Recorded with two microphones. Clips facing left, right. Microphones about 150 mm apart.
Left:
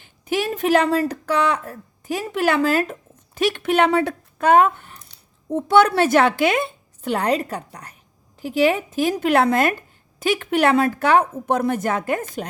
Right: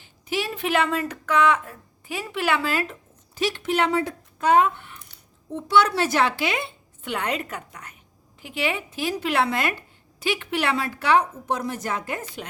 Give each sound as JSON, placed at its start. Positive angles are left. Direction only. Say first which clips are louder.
{"t": 0.0, "sound": "a woman's voice", "louder": "left 5 dB", "side_deg": 50}